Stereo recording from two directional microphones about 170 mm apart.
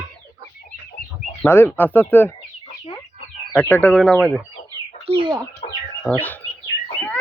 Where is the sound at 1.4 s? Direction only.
15° left (ahead or behind).